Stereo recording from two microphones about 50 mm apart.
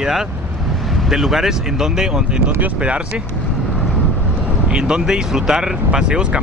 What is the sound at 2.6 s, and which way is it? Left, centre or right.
Speech, right.